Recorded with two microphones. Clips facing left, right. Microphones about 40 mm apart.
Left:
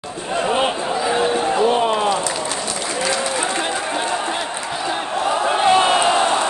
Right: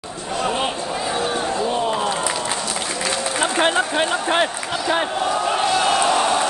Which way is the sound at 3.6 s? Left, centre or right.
Right.